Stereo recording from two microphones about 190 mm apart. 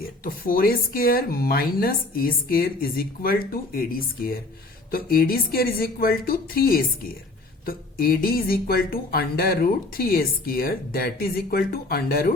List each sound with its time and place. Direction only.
0.3 s speech: 50° left (ahead or behind)